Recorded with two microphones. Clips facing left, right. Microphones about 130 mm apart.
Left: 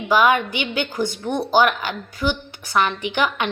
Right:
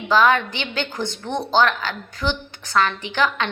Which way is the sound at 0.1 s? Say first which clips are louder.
Even; 15° left (ahead or behind).